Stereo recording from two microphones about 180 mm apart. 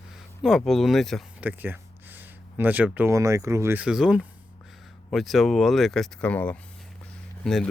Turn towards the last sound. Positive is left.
turn(degrees=5)  # may be behind; listen again after turning